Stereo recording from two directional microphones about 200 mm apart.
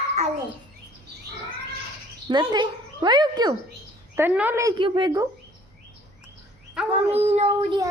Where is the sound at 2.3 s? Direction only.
20° right (ahead or behind).